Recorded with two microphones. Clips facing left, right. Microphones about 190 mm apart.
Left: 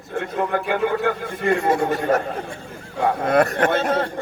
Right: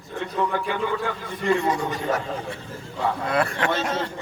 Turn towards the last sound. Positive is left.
turn(degrees=55)  # may be behind; listen again after turning